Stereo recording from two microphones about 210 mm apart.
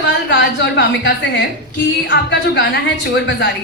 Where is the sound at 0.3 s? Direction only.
55° left (ahead or behind).